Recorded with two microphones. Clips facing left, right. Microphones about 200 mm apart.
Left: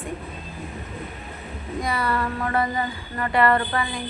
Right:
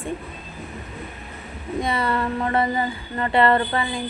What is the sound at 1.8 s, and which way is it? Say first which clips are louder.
Speech: right 2 dB; 25° right (ahead or behind).